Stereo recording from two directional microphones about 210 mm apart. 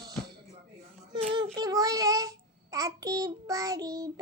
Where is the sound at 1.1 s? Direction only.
20° right (ahead or behind).